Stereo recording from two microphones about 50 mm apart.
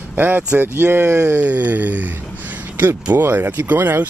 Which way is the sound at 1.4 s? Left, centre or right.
Right.